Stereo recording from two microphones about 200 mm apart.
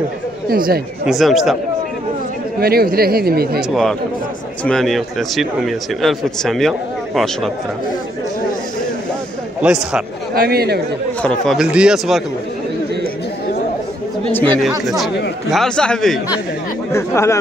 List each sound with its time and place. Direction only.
0.5 s speech: 45° right (ahead or behind)
1.0 s speech: centre (ahead or behind)
2.6 s speech: 50° right (ahead or behind)
4.6 s speech: centre (ahead or behind)
9.6 s speech: 5° right (ahead or behind)
10.3 s speech: 50° right (ahead or behind)
11.2 s speech: centre (ahead or behind)
14.3 s speech: 10° left (ahead or behind)
16.9 s speech: 15° left (ahead or behind)